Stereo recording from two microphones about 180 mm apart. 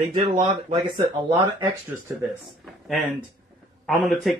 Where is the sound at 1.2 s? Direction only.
15° right (ahead or behind).